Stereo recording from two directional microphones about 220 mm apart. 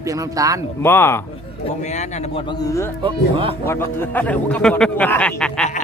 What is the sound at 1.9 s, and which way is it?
Speech, 30° left (ahead or behind).